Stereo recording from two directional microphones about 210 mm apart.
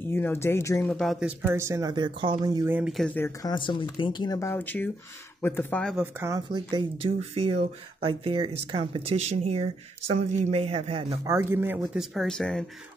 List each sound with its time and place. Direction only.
0.1 s speech: 10° left (ahead or behind)
0.9 s speech: centre (ahead or behind)
1.4 s speech: 10° right (ahead or behind)
3.3 s speech: 20° left (ahead or behind); by 6.0 s 5° left (ahead or behind)
6.1 s speech: 15° right (ahead or behind)
11.2 s speech: 10° right (ahead or behind)